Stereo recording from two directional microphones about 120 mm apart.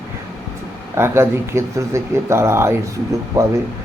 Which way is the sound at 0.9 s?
20° right (ahead or behind).